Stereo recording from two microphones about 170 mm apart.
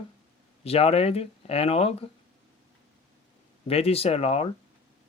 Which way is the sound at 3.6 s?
35° left (ahead or behind).